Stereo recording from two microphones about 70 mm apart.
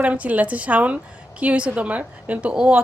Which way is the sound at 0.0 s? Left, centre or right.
Right.